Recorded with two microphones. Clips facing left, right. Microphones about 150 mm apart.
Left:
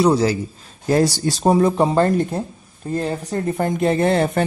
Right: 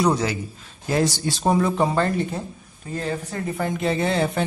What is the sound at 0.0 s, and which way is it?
Speech, 30° left (ahead or behind).